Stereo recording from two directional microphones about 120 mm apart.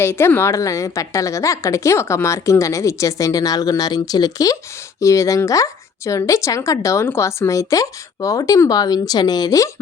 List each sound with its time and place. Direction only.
0.0 s a woman's voice: 20° left (ahead or behind)